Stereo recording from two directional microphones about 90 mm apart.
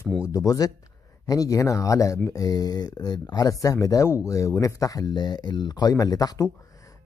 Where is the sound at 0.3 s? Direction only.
35° left (ahead or behind).